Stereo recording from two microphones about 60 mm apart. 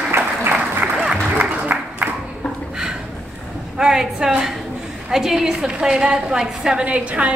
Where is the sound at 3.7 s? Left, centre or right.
Centre.